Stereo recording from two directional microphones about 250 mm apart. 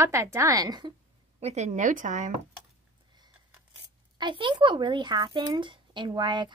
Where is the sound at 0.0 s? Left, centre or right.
Centre.